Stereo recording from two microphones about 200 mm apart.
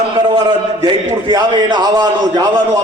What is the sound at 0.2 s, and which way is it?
A man's voice, 20° right (ahead or behind).